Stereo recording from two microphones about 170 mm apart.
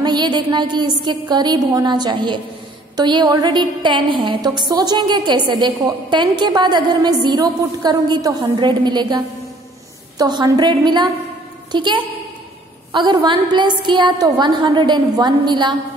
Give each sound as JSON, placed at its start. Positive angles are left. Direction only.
{"t": 0.0, "sound": "a woman's voice", "side_deg": -25}